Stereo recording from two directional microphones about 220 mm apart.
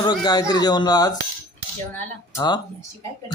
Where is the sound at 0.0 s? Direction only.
20° left (ahead or behind).